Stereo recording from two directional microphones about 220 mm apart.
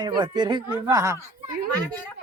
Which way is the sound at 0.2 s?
20° right (ahead or behind).